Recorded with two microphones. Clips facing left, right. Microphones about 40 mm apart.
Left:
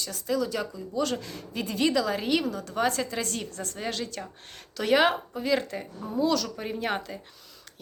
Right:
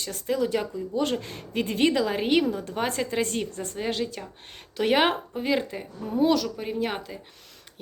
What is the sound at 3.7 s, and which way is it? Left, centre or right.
A woman's voice, centre.